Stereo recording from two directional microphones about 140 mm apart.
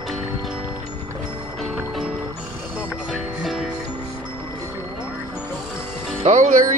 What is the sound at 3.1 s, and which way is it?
Music, centre (ahead or behind).